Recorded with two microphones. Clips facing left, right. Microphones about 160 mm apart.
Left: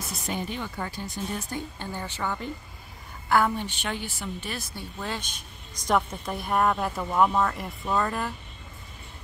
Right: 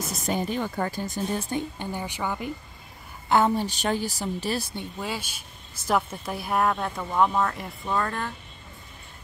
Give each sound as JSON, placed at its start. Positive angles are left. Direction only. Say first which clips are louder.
{"t": 0.0, "sound": "speech", "louder": "right 4 dB", "side_deg": -45}
{"t": 1.8, "sound": "a woman's voice", "louder": "right 2 dB", "side_deg": -15}
{"t": 3.3, "sound": "a woman's voice", "louder": "right 2 dB", "side_deg": -25}
{"t": 3.5, "sound": "speech", "louder": "right 6 dB", "side_deg": -40}
{"t": 4.7, "sound": "a woman's voice", "louder": "right 2 dB", "side_deg": -10}